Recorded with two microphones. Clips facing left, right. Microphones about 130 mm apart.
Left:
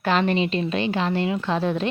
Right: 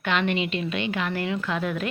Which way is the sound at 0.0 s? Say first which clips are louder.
Left 4 dB; 35° left (ahead or behind).